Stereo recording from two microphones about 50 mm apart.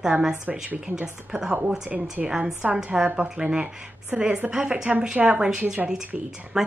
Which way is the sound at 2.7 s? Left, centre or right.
Centre.